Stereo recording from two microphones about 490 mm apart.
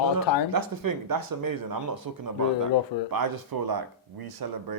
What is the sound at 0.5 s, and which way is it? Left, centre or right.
Speech, right.